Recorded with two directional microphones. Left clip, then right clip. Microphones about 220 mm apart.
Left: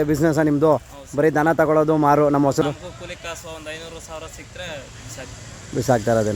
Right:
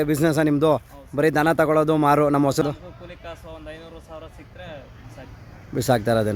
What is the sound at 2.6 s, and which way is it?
Speech, 10° left (ahead or behind).